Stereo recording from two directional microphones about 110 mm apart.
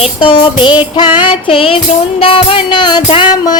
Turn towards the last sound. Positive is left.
turn(degrees=45)  # may be behind; listen again after turning